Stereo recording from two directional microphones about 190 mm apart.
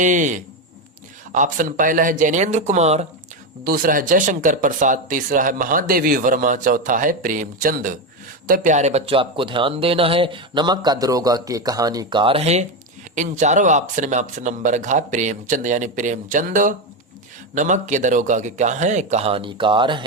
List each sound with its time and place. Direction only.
0.0 s speech: 40° right (ahead or behind)
3.6 s speech: 50° right (ahead or behind); by 20.1 s 25° right (ahead or behind)